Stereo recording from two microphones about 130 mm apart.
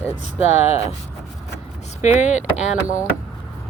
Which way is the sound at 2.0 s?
65° left (ahead or behind).